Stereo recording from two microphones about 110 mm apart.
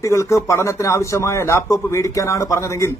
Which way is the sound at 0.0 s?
25° left (ahead or behind).